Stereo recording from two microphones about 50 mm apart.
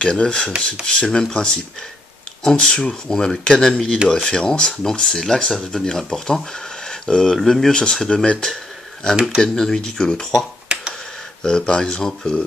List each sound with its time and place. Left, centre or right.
0.0 s speech: centre
0.8 s dishes: centre
2.4 s speech: centre
10.7 s finger snapping: centre
11.4 s speech: centre